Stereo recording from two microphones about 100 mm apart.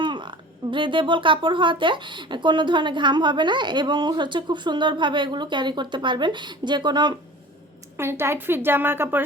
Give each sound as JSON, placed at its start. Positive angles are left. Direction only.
{"t": 0.0, "sound": "speech", "side_deg": -55}
{"t": 7.9, "sound": "a woman's voice", "side_deg": -25}